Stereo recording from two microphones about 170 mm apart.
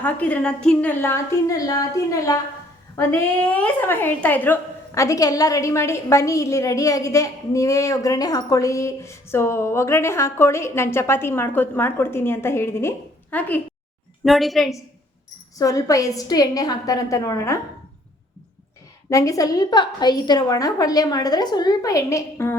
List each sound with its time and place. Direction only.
0.0 s a woman's voice: 10° left (ahead or behind)
15.5 s a woman's voice: 20° left (ahead or behind)
19.1 s a woman's voice: 20° left (ahead or behind)